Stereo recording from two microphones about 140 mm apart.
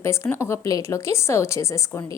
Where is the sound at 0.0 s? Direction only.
20° left (ahead or behind).